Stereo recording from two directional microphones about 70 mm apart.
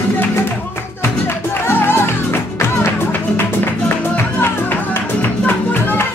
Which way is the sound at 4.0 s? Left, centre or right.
Left.